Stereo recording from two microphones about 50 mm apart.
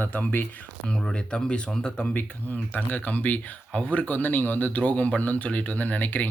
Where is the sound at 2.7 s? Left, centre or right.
Left.